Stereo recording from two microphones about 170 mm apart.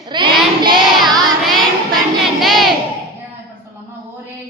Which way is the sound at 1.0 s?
Centre (ahead or behind).